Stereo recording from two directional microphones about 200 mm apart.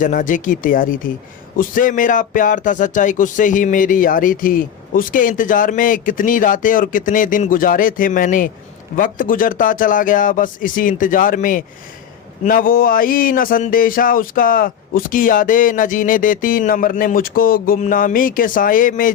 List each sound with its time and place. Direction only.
0.0 s speech: 40° left (ahead or behind)